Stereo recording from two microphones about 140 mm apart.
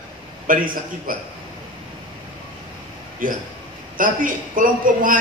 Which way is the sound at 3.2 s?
70° right (ahead or behind).